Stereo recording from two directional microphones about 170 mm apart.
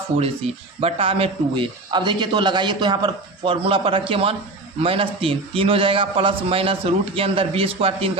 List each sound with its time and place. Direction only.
0.8 s a man's voice: 35° right (ahead or behind)